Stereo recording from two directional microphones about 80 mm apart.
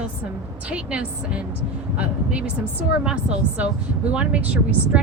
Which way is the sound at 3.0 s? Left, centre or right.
Centre.